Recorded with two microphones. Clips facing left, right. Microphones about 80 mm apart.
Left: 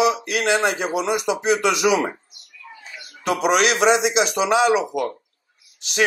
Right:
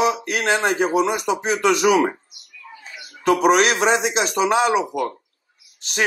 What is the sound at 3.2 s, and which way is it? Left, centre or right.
Speech, right.